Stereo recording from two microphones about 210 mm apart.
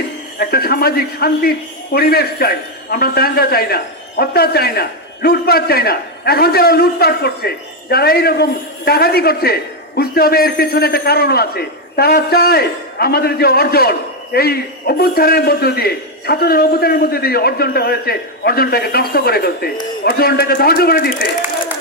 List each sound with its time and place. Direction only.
0.3 s a man's voice: 45° left (ahead or behind)